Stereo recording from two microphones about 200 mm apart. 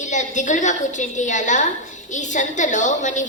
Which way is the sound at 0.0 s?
40° left (ahead or behind).